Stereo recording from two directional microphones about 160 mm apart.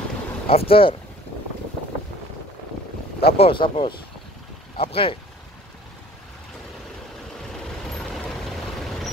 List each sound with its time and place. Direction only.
0.5 s speech: 35° left (ahead or behind)
3.2 s speech: 35° left (ahead or behind)
8.1 s vehicle: centre (ahead or behind)